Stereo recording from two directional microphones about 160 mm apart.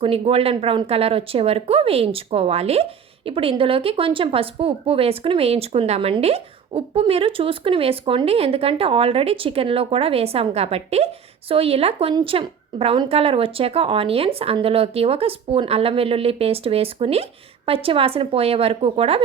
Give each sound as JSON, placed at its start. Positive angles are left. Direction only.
{"t": 0.0, "sound": "a woman's voice", "side_deg": -35}